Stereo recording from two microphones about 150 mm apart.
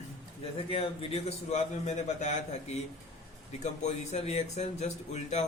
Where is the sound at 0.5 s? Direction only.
40° left (ahead or behind).